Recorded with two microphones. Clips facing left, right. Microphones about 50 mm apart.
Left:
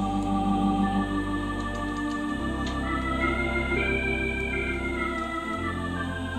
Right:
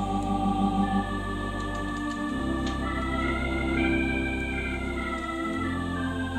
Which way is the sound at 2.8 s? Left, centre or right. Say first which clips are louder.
Left 2 dB; centre.